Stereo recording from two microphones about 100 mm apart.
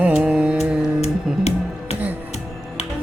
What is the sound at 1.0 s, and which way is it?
Music, 90° left.